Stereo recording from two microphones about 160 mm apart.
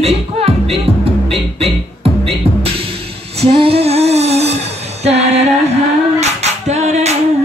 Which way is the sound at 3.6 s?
35° right (ahead or behind).